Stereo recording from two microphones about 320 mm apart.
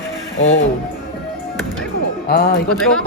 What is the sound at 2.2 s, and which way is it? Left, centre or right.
Speech, left.